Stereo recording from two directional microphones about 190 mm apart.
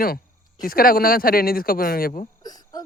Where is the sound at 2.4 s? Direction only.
20° left (ahead or behind).